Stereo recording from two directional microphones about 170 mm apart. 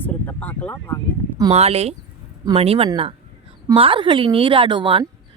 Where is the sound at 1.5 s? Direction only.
35° right (ahead or behind).